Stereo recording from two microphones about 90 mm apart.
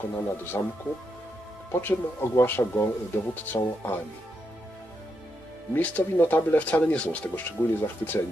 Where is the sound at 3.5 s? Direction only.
50° left (ahead or behind).